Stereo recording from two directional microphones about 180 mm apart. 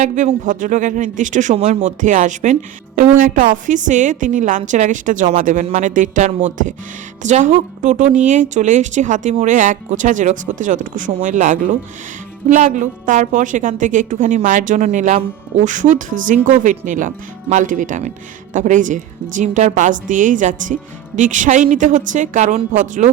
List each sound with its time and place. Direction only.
0.0 s a woman's voice: 40° right (ahead or behind)